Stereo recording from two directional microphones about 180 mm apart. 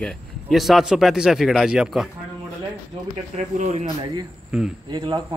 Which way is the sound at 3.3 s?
40° right (ahead or behind).